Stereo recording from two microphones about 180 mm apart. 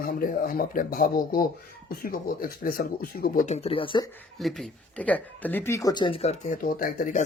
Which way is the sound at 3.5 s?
35° left (ahead or behind).